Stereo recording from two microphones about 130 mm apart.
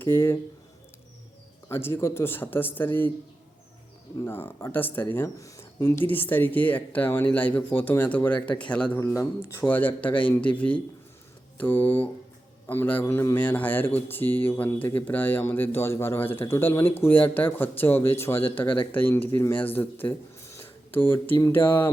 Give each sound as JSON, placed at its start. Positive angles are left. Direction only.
{"t": 0.0, "sound": "speech", "side_deg": 20}
{"t": 1.7, "sound": "speech", "side_deg": 20}
{"t": 4.2, "sound": "speech", "side_deg": 15}
{"t": 9.0, "sound": "speech", "side_deg": 20}